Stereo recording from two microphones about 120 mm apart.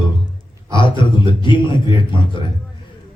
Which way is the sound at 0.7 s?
45° left (ahead or behind).